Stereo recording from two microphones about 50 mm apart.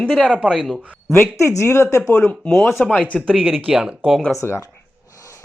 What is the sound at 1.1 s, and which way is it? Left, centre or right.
Speech, left.